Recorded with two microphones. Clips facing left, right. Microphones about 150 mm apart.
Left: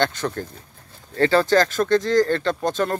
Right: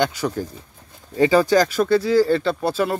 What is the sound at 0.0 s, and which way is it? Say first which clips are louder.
Speech: right 2 dB; 10° right (ahead or behind).